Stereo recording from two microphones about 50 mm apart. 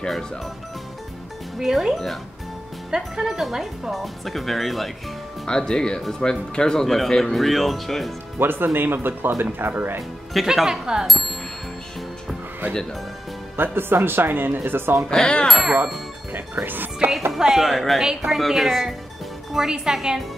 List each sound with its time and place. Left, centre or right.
1.6 s speech: centre
3.2 s speech: centre
5.5 s speech: centre
8.4 s speech: right
10.3 s speech: centre
11.1 s music: centre
13.6 s speech: right
15.0 s speech: centre
15.4 s speech: centre
16.6 s speech: right
17.4 s speech: centre
17.6 s speech: centre